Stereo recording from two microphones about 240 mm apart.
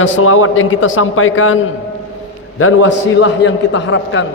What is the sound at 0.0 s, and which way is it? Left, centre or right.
A man's voice, left.